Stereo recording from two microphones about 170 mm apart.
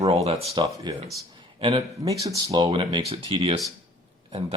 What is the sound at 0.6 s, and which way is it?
Speech, 25° right (ahead or behind).